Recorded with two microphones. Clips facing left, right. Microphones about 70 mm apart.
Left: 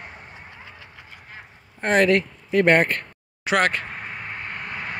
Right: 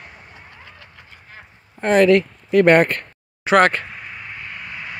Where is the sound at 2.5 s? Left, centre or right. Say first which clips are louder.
Right 4 dB; right.